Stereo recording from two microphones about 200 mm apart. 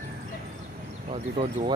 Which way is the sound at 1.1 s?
25° right (ahead or behind).